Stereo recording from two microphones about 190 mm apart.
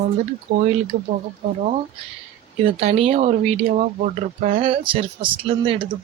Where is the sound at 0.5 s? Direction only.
55° right (ahead or behind).